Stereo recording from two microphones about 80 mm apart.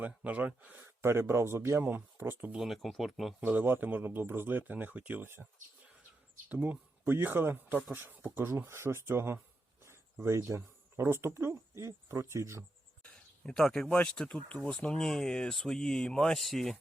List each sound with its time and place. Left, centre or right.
0.2 s speech: centre
1.0 s speech: right
2.6 s speech: centre
3.4 s speech: right
6.5 s speech: right
13.0 s a sound: centre
13.9 s speech: centre